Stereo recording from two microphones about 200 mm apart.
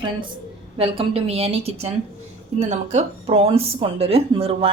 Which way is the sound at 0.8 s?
30° right (ahead or behind).